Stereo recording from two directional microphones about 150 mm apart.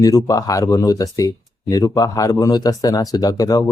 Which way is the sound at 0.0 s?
25° left (ahead or behind).